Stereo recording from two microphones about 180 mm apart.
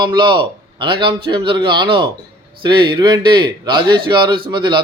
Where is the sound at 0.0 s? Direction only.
25° right (ahead or behind).